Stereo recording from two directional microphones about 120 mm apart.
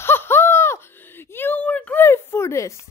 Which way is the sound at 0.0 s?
20° left (ahead or behind).